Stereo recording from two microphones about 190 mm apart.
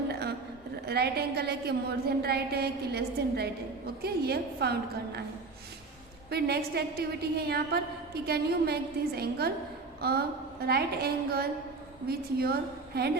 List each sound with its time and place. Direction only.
0.1 s a sound: 60° right (ahead or behind)
0.9 s a woman's voice: 55° right (ahead or behind)
6.3 s a woman's voice: 55° right (ahead or behind)